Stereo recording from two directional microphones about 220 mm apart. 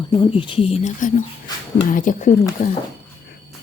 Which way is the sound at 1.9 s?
35° left (ahead or behind).